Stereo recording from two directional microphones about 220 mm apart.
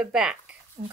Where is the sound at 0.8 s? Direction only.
40° right (ahead or behind).